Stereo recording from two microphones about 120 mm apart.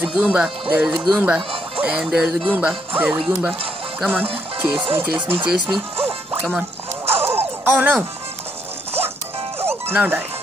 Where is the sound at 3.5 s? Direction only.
50° right (ahead or behind).